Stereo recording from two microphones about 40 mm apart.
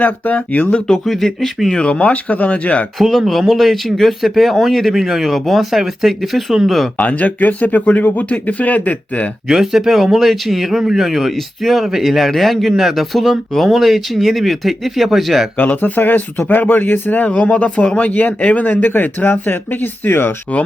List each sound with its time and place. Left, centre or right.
0.0 s speech: left
1.0 s speech: centre
1.7 s speech: left
3.1 s speech: centre
6.9 s speech: left
9.5 s speech: centre
15.5 s speech: left
17.3 s speech: left
17.9 s speech: left
18.3 s speech: left
18.6 s speech: left